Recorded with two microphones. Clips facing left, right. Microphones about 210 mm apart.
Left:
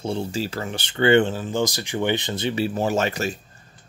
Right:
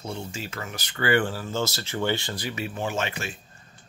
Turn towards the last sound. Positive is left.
turn(degrees=40)  # may be behind; listen again after turning